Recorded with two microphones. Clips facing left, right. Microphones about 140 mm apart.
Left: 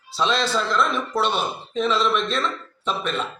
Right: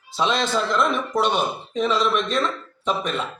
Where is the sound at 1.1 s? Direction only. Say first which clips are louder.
Right 1 dB; 15° right (ahead or behind).